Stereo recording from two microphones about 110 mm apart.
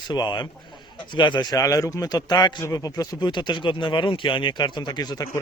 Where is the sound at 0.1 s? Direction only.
40° left (ahead or behind).